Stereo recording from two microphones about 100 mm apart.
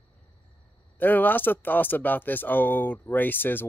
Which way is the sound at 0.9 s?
20° left (ahead or behind).